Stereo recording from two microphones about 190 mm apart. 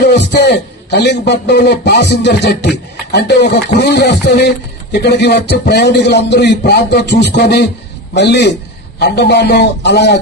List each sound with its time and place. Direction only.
0.0 s speech: 60° left (ahead or behind)